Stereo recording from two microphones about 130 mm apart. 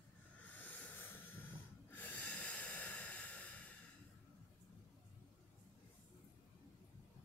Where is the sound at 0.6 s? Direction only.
10° left (ahead or behind).